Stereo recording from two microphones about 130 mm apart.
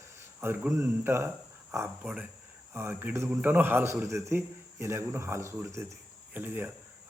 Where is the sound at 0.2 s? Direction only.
20° right (ahead or behind).